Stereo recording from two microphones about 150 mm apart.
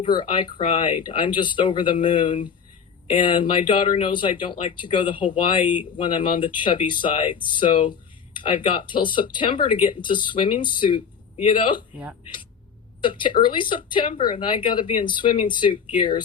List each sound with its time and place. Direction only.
0.0 s speech: 35° left (ahead or behind)
13.0 s speech: 35° left (ahead or behind)